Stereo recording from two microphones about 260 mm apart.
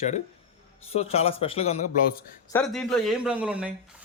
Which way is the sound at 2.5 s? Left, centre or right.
Centre.